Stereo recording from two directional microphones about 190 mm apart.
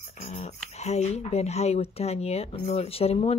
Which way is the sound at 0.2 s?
35° left (ahead or behind).